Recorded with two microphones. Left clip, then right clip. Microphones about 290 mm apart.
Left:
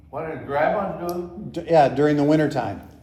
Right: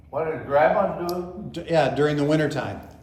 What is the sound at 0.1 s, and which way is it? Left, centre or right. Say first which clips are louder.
A man's voice: right 4 dB; centre.